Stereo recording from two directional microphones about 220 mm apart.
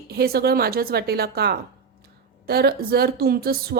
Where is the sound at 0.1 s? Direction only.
45° right (ahead or behind).